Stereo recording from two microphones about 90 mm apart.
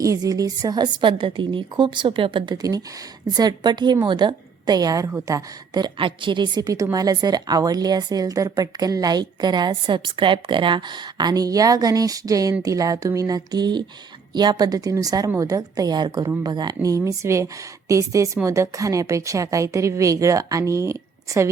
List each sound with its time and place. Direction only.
0.0 s a woman's voice: 40° right (ahead or behind)
1.0 s a woman's voice: 60° right (ahead or behind)
2.6 s a woman's voice: 45° right (ahead or behind)
6.0 s a woman's voice: 70° right (ahead or behind); by 21.5 s 35° right (ahead or behind)